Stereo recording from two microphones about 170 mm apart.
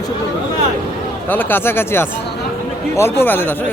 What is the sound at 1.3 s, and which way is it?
Speech, 10° left (ahead or behind).